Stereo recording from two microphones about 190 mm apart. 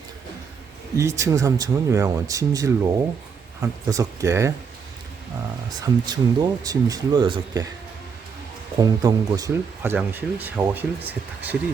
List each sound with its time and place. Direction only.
0.9 s speech: 15° right (ahead or behind)
5.8 s speech: 20° right (ahead or behind)
8.8 s speech: 20° right (ahead or behind)